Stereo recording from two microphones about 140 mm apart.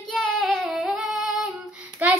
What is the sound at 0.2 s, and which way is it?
Female singing, centre (ahead or behind).